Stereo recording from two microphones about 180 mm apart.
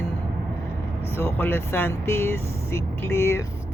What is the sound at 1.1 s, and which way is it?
Speech, 10° left (ahead or behind).